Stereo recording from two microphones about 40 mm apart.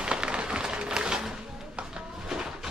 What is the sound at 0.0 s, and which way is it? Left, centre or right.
Music, right.